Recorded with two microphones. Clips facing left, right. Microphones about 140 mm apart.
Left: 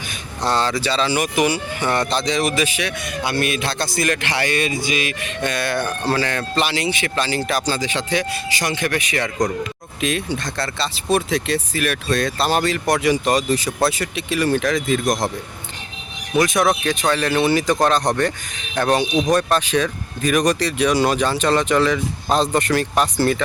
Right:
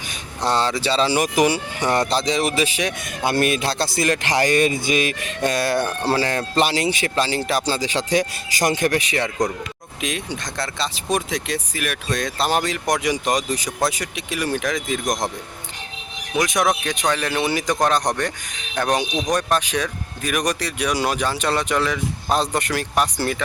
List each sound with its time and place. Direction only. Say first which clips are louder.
0.4 s speech: even; 20° right (ahead or behind)
0.8 s speech: right 1 dB; 35° right (ahead or behind)
10.0 s speech: left 5 dB; 15° right (ahead or behind)
16.3 s speech: left 3 dB; 15° right (ahead or behind)